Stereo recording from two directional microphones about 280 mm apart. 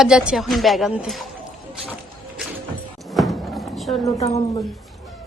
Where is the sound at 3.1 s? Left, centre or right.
Centre.